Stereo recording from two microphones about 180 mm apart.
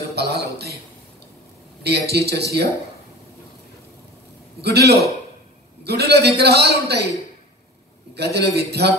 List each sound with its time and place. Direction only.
0.1 s a sound: 60° right (ahead or behind)
1.8 s a man's voice: 65° right (ahead or behind)
4.6 s a man's voice: 65° right (ahead or behind)
8.1 s a man's voice: 65° right (ahead or behind)